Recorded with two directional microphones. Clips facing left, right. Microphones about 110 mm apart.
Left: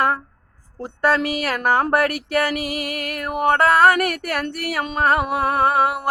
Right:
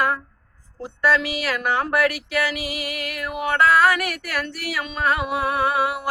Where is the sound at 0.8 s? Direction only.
50° left (ahead or behind).